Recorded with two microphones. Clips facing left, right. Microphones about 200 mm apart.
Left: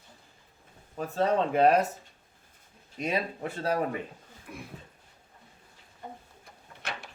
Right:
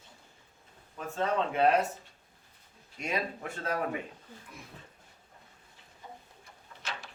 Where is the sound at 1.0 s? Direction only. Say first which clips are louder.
Left 4 dB; 40° left (ahead or behind).